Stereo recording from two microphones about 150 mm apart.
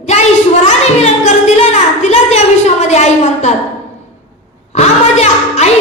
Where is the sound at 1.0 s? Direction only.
50° left (ahead or behind).